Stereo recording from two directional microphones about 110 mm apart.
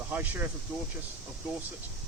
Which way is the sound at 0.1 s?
20° right (ahead or behind).